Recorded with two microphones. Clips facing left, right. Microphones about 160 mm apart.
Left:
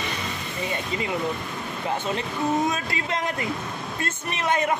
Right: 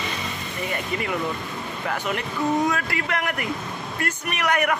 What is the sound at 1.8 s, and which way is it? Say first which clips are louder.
Speech: even; 20° left (ahead or behind).